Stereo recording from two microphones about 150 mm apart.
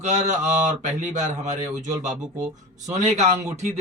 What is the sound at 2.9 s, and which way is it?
Speech, 50° right (ahead or behind).